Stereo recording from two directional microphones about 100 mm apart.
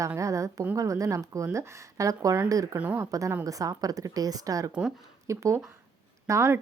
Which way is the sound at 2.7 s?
15° right (ahead or behind).